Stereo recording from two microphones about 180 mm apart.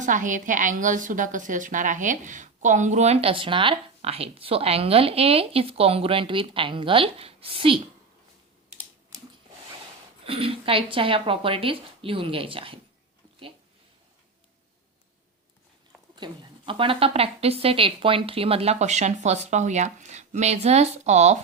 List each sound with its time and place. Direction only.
0.0 s a woman's voice: 45° right (ahead or behind); by 7.8 s 30° right (ahead or behind)
10.2 s a woman's voice: 30° right (ahead or behind)
16.1 s a woman's voice: 25° right (ahead or behind)